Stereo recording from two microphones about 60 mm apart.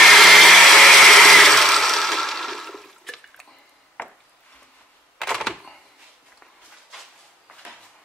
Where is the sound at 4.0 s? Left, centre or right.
Left.